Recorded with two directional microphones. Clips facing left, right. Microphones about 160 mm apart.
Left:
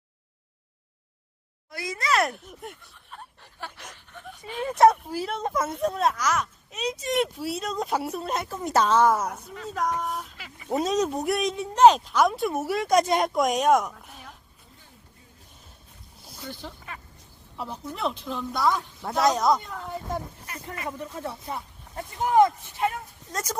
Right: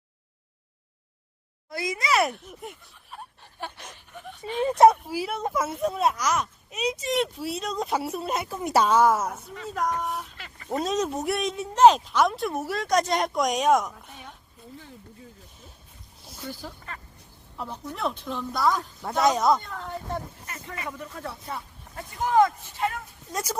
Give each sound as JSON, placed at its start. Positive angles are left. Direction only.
{"t": 1.7, "sound": "a sound", "side_deg": -15}
{"t": 4.6, "sound": "speech", "side_deg": -20}
{"t": 4.9, "sound": "speech", "side_deg": -5}
{"t": 16.2, "sound": "a sound", "side_deg": 0}
{"t": 17.6, "sound": "speech", "side_deg": 5}
{"t": 21.2, "sound": "speech", "side_deg": 20}
{"t": 23.3, "sound": "speech", "side_deg": -10}